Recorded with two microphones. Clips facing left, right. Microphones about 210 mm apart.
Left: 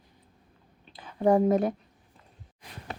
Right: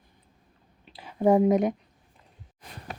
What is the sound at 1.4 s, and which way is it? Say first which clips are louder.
Speech: right 2 dB; 20° right (ahead or behind).